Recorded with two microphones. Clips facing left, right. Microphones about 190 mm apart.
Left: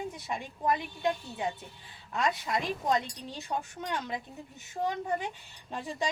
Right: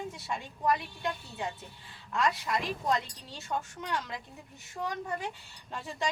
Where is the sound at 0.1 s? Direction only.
20° left (ahead or behind).